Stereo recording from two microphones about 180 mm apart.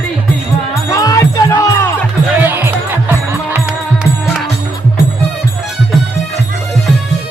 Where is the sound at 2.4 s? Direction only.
10° right (ahead or behind).